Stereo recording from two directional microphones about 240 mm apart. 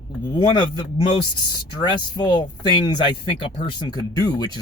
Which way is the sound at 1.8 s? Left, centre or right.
Centre.